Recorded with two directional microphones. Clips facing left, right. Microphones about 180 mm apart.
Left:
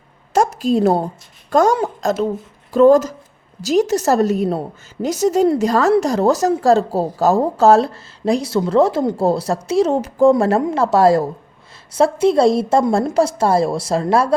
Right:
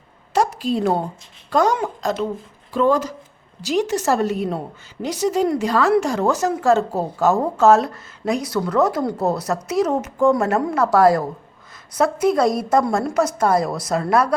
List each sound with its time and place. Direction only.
0.3 s a woman's voice: 45° left (ahead or behind); by 14.3 s 25° left (ahead or behind)